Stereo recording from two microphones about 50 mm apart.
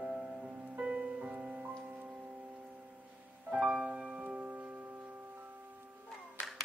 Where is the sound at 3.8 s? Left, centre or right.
Centre.